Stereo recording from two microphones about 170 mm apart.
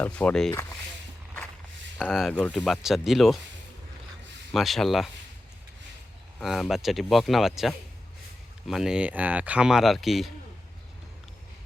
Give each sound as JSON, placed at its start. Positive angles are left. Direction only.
{"t": 0.0, "sound": "speech", "side_deg": 5}
{"t": 2.0, "sound": "speech", "side_deg": 0}
{"t": 4.5, "sound": "speech", "side_deg": 0}
{"t": 6.4, "sound": "speech", "side_deg": 0}